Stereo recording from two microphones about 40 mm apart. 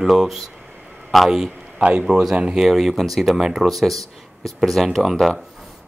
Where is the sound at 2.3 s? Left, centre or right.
Right.